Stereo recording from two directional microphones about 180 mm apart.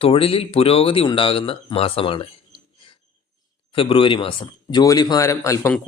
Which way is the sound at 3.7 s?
30° left (ahead or behind).